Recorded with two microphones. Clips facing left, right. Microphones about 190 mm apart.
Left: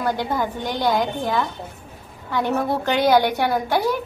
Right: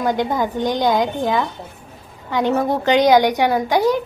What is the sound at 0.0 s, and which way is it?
A woman's voice, 20° right (ahead or behind).